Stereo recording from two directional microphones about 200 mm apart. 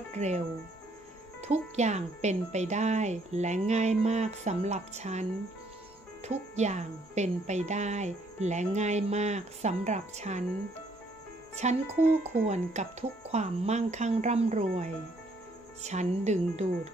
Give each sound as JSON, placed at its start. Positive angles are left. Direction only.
{"t": 0.1, "sound": "speech", "side_deg": -35}
{"t": 1.4, "sound": "speech", "side_deg": -35}
{"t": 6.2, "sound": "speech", "side_deg": -35}
{"t": 11.5, "sound": "speech", "side_deg": -35}